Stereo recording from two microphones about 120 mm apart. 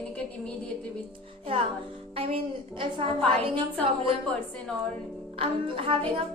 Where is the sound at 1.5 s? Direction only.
50° right (ahead or behind).